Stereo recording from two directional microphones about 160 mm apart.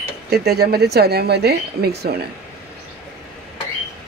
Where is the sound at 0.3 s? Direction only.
90° right.